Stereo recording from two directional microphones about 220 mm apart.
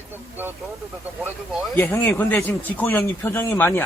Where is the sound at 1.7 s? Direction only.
10° left (ahead or behind).